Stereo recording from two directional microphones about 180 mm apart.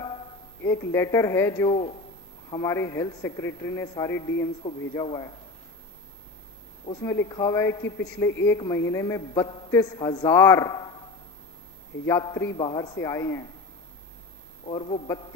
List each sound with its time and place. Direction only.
0.6 s a man's voice: 15° left (ahead or behind)
1.7 s a man's voice: 30° left (ahead or behind)
4.6 s speech: 30° left (ahead or behind)
7.0 s a man's voice: 15° left (ahead or behind)
12.0 s a man's voice: 15° left (ahead or behind)
14.7 s speech: 30° left (ahead or behind)